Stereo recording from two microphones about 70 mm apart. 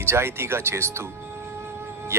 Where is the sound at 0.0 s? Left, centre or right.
Right.